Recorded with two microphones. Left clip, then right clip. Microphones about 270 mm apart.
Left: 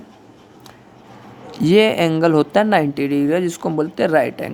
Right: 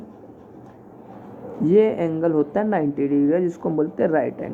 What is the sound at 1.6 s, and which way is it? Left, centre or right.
Speech, left.